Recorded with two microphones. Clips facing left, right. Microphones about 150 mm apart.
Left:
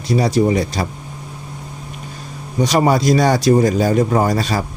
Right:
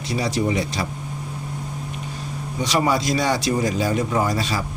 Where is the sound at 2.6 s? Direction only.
45° left (ahead or behind).